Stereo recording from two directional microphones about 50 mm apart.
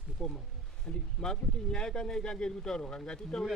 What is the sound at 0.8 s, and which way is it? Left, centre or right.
Speech, centre.